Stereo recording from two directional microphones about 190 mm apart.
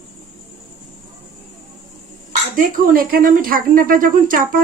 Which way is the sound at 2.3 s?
45° right (ahead or behind).